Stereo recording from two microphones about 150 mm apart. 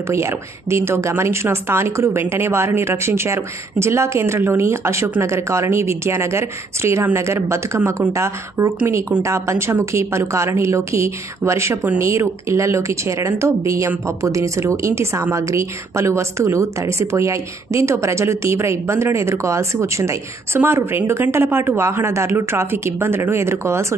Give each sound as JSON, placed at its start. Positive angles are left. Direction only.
{"t": 0.1, "sound": "a woman's voice", "side_deg": -20}